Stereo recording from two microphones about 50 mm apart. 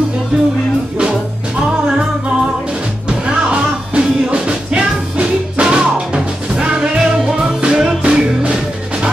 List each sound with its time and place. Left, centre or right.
1.6 s music: centre